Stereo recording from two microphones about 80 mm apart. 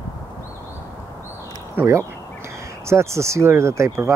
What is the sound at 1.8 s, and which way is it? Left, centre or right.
Speech, right.